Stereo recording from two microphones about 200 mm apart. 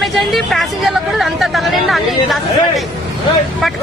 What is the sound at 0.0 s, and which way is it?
Speech, centre (ahead or behind).